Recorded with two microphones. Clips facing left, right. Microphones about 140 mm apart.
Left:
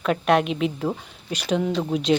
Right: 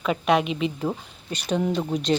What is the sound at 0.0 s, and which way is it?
Speech, centre (ahead or behind).